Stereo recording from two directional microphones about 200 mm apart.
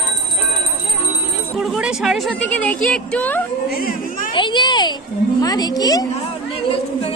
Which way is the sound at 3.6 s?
50° left (ahead or behind).